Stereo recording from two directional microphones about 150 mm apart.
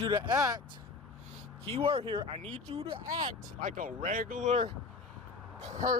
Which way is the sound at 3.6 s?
65° right (ahead or behind).